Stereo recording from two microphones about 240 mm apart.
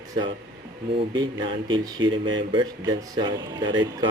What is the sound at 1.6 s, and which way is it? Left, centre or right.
Speech, centre.